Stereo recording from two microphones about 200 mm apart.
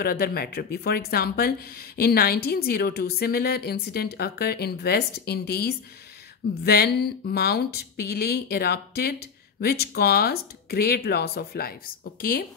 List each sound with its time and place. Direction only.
0.0 s a woman's voice: 50° left (ahead or behind)